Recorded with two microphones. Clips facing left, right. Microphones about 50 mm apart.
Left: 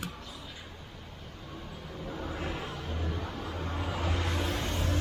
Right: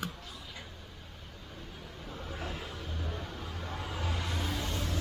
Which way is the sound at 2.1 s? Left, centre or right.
Left.